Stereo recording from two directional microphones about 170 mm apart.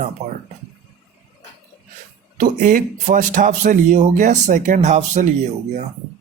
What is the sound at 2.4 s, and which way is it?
A man's voice, 50° right (ahead or behind).